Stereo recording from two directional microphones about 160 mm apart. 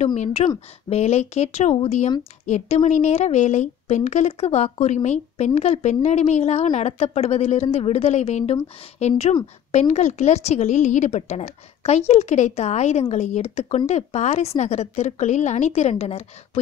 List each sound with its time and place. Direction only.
0.0 s a woman's voice: 45° left (ahead or behind)